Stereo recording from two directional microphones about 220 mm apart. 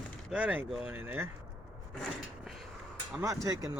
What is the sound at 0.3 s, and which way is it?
Speech, 5° right (ahead or behind).